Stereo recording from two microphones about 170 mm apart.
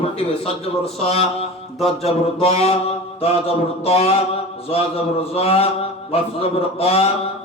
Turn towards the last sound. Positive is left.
turn(degrees=35)  # may be behind; listen again after turning